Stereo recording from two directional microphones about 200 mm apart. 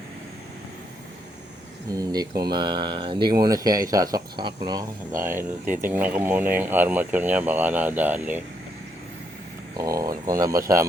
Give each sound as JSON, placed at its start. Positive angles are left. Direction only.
{"t": 1.9, "sound": "speech", "side_deg": -20}
{"t": 9.7, "sound": "speech", "side_deg": -15}